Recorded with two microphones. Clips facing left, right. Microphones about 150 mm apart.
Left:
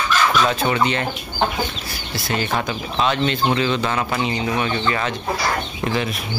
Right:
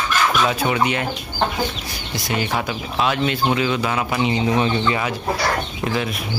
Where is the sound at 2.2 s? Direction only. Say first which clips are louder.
Even; 15° right (ahead or behind).